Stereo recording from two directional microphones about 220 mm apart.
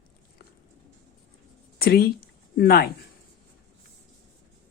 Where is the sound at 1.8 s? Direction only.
45° left (ahead or behind).